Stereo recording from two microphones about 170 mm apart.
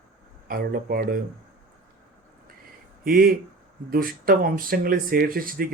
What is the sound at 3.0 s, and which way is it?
Speech, 60° right (ahead or behind).